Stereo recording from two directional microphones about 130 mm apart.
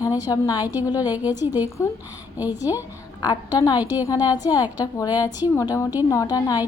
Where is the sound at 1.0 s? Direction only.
10° right (ahead or behind).